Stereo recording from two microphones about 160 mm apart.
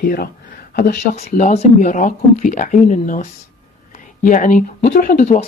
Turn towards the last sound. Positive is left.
turn(degrees=60)  # may be behind; listen again after turning